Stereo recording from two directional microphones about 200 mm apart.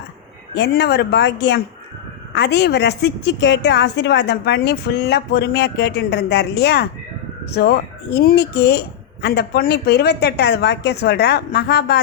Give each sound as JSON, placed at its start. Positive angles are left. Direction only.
{"t": 0.5, "sound": "a woman's voice", "side_deg": 55}